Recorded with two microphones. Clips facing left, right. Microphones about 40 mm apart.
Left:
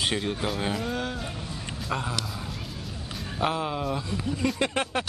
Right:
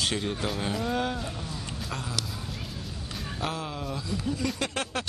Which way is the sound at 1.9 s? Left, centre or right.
Centre.